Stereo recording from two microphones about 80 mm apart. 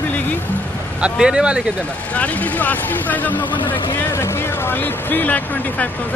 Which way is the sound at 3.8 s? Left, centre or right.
Left.